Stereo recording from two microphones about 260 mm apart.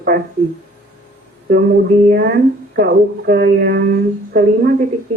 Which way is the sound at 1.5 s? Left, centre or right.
Right.